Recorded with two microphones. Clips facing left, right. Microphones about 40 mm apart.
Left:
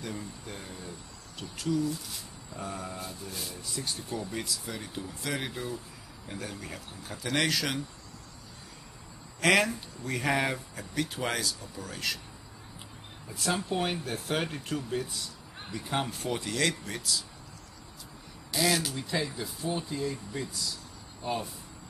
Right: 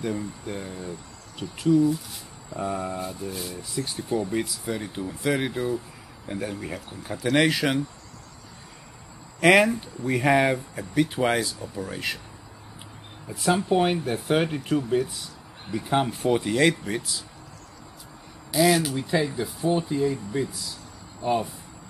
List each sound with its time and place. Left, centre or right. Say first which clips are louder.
0.0 s speech: right 9 dB; centre
9.4 s speech: right 7 dB; centre
13.3 s speech: right 8 dB; centre
18.5 s speech: right 8 dB; centre